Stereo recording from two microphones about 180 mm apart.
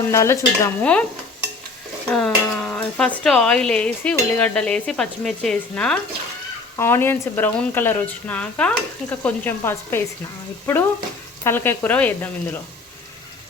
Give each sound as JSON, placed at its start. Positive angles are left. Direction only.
{"t": 0.1, "sound": "speech", "side_deg": 15}
{"t": 2.1, "sound": "speech", "side_deg": 5}